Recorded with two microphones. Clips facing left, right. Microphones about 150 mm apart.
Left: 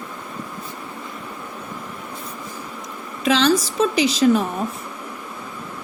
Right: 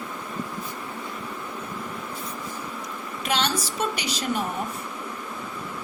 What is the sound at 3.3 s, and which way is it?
Speech, 90° left.